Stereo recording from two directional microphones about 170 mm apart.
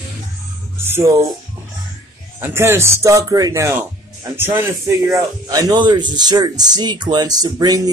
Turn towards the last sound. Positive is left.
turn(degrees=-20)  # may be behind; listen again after turning